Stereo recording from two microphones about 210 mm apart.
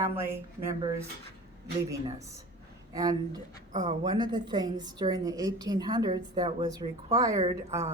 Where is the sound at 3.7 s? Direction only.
35° right (ahead or behind).